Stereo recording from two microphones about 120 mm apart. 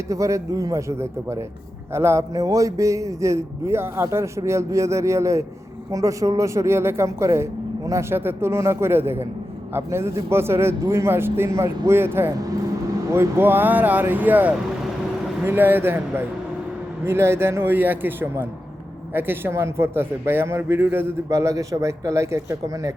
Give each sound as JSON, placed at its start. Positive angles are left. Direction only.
{"t": 0.1, "sound": "speech", "side_deg": -25}